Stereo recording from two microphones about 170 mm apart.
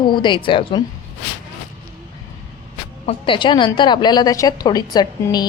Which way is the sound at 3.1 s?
30° left (ahead or behind).